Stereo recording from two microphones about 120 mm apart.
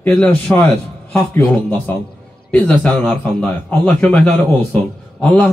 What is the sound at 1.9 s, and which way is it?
Speech, 15° left (ahead or behind).